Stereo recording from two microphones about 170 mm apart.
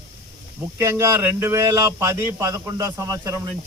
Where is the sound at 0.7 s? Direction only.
15° right (ahead or behind).